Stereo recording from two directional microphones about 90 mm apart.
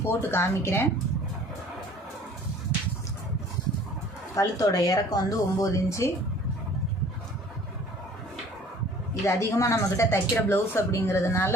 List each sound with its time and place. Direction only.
0.0 s speech: 25° left (ahead or behind)
4.4 s speech: 40° left (ahead or behind)
9.2 s speech: 35° left (ahead or behind)